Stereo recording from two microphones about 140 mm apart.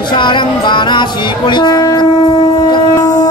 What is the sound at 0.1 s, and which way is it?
Music, 35° left (ahead or behind).